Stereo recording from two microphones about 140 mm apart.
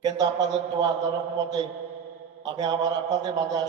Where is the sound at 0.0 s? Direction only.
30° right (ahead or behind).